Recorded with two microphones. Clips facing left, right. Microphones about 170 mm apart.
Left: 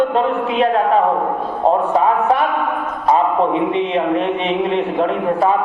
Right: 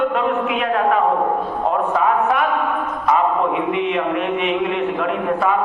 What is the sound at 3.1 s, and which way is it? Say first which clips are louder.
A man's voice: left 3 dB; 30° left (ahead or behind).